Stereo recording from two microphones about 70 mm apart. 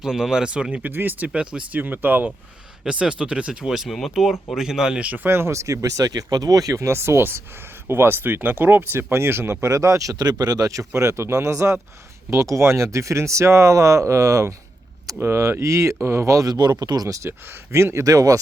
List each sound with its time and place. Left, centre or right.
0.0 s speech: centre; by 2.3 s right
2.8 s speech: centre
5.0 s speech: right
16.5 s speech: right
17.2 s speech: right
18.0 s speech: right